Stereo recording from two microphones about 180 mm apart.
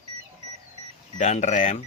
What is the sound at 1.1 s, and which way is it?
Speech, 40° left (ahead or behind).